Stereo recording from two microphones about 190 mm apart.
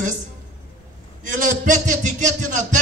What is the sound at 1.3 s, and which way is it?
A man's voice, 40° right (ahead or behind).